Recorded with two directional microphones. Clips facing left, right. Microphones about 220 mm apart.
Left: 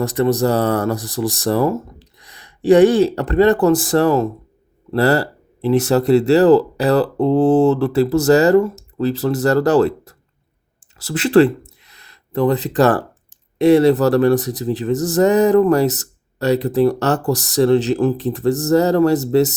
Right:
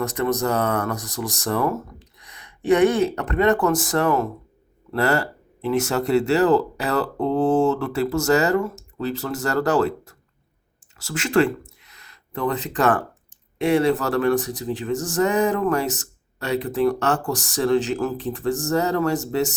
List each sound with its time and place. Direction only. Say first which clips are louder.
0.0 s speech: left 6 dB; 35° left (ahead or behind)